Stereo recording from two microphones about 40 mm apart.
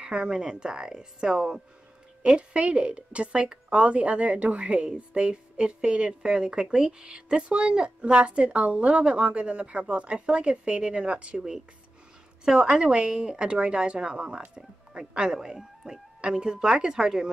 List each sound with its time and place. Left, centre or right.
0.0 s a woman's voice: centre
2.2 s a woman's voice: right
12.4 s a woman's voice: centre
15.3 s speech: centre
16.2 s a woman's voice: right